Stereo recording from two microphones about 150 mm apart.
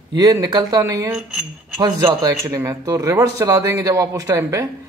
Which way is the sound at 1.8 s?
25° right (ahead or behind).